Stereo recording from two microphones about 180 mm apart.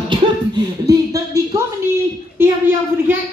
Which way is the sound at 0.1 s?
25° right (ahead or behind).